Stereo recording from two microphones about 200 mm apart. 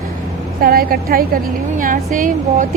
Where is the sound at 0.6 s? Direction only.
50° right (ahead or behind).